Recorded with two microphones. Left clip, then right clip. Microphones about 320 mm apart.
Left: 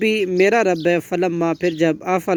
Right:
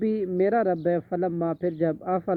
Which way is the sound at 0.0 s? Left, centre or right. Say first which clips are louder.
Left 8 dB; left.